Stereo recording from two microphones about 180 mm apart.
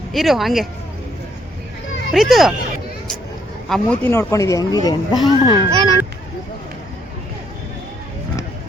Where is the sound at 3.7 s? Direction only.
10° left (ahead or behind); by 5.6 s 25° left (ahead or behind).